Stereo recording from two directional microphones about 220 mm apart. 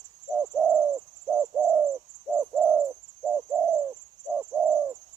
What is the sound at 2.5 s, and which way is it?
Bird, 5° right (ahead or behind).